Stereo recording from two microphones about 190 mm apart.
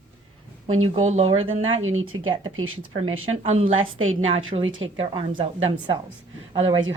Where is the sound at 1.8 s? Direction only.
90° right.